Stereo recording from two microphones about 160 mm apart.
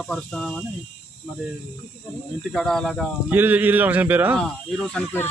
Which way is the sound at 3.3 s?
10° right (ahead or behind).